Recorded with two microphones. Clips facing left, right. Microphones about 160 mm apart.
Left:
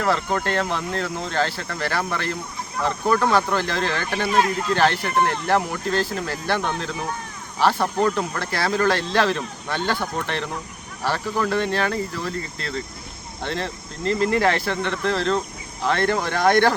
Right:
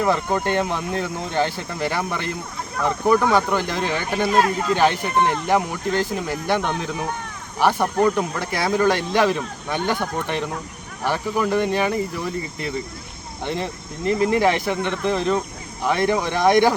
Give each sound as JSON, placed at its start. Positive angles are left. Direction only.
{"t": 0.0, "sound": "speech", "side_deg": -15}